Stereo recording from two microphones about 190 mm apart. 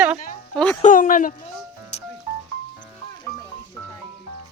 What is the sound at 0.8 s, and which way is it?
Speech, 45° left (ahead or behind).